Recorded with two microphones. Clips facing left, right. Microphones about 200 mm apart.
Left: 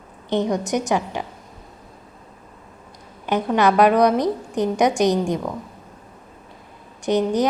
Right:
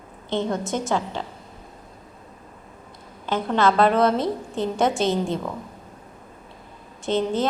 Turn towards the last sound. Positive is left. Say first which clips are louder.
# left 3 dB
turn(degrees=15)  # may be behind; listen again after turning